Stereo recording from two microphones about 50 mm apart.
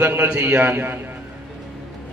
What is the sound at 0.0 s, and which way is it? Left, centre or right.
Speech, right.